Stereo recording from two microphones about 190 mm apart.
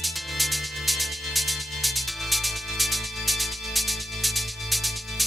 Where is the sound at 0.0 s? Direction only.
Centre (ahead or behind).